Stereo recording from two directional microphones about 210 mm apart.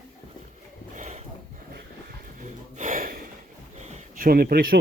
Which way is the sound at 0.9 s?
35° right (ahead or behind).